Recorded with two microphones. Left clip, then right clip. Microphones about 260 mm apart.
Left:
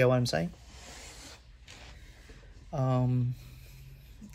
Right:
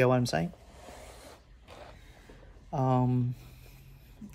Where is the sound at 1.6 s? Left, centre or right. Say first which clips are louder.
Right 3 dB; centre.